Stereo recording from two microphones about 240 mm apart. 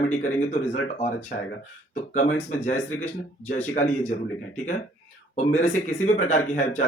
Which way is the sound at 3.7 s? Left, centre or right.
Left.